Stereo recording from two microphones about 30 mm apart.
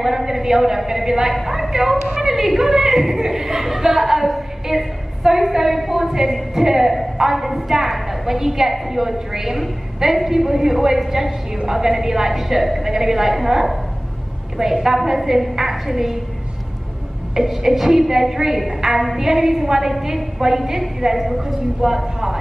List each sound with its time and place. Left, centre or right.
0.0 s a woman's voice: centre
17.3 s speech: centre